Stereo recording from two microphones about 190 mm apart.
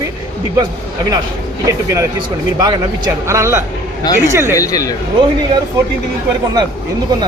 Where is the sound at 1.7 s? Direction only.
15° right (ahead or behind).